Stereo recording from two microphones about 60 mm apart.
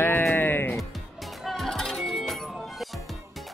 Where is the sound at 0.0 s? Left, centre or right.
Left.